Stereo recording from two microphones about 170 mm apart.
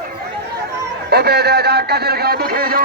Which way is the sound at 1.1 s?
70° right (ahead or behind).